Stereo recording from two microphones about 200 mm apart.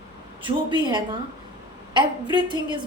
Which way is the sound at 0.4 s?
25° right (ahead or behind).